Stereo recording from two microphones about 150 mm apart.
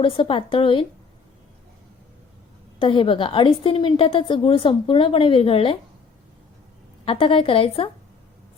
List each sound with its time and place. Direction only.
0.0 s a woman's voice: 35° left (ahead or behind)
2.8 s a woman's voice: 35° left (ahead or behind)
7.0 s a woman's voice: 35° left (ahead or behind)